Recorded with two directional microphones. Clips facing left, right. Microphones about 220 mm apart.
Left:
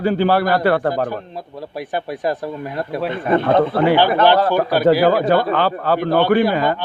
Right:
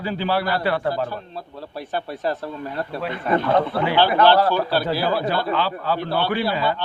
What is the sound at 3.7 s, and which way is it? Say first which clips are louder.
Speech: left 7 dB; 55° left (ahead or behind).